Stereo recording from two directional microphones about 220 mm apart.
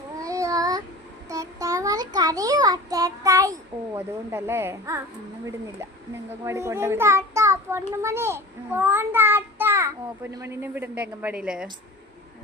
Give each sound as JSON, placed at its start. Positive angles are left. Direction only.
{"t": 0.2, "sound": "child singing", "side_deg": -15}
{"t": 6.4, "sound": "a child's voice", "side_deg": -10}